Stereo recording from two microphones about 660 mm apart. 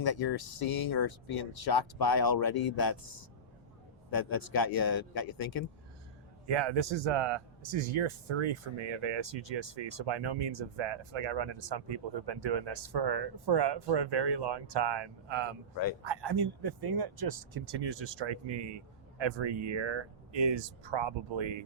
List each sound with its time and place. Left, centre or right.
0.0 s speech: left
4.1 s speech: left
6.5 s speech: right